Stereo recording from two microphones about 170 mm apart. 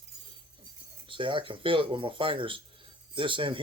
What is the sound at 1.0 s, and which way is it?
Speech, 30° right (ahead or behind).